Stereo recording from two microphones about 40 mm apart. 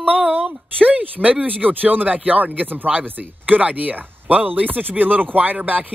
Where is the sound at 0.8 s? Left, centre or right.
Right.